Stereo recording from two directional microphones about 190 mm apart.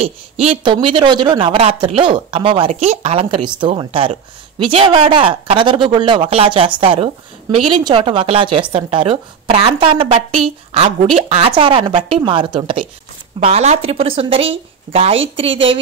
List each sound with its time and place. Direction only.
0.0 s a woman's voice: 30° right (ahead or behind)